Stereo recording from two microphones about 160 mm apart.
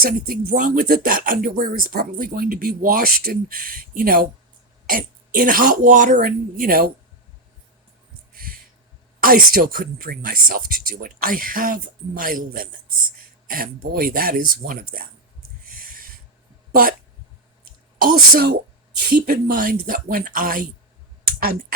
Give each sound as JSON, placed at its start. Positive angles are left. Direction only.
{"t": 0.0, "sound": "speech", "side_deg": -65}
{"t": 9.2, "sound": "speech", "side_deg": -65}
{"t": 15.6, "sound": "snort", "side_deg": -60}
{"t": 18.0, "sound": "speech", "side_deg": -75}